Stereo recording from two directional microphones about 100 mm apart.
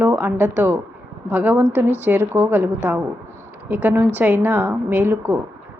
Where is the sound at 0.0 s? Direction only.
20° right (ahead or behind).